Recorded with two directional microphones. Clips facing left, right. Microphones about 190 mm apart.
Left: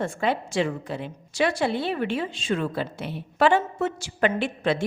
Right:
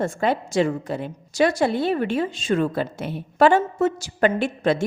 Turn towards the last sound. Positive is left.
turn(degrees=-45)  # may be behind; listen again after turning